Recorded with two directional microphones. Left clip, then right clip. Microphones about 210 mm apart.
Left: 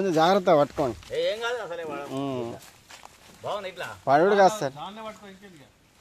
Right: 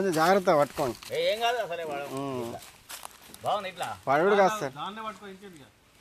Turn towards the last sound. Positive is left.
turn(degrees=-15)  # may be behind; listen again after turning